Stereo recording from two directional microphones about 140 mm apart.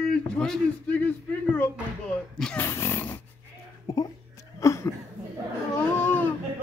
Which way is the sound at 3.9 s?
25° left (ahead or behind).